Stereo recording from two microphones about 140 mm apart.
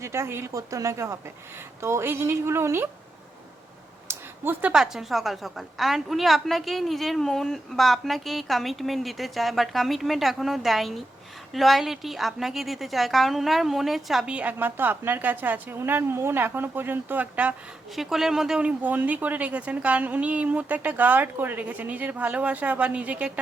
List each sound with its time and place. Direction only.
0.0 s a woman's voice: 20° right (ahead or behind)
4.1 s a sound: 15° right (ahead or behind)
4.7 s a woman's voice: 5° right (ahead or behind)